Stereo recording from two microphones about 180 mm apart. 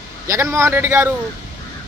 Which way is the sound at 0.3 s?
15° right (ahead or behind).